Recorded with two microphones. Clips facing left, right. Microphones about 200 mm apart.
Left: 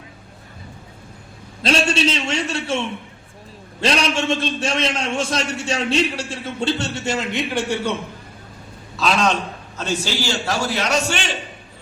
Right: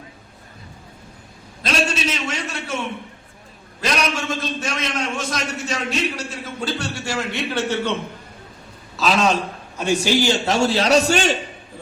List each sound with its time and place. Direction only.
1.6 s a man's voice: 30° left (ahead or behind); by 7.9 s 15° left (ahead or behind)
9.0 s a man's voice: centre (ahead or behind); by 11.3 s 40° right (ahead or behind)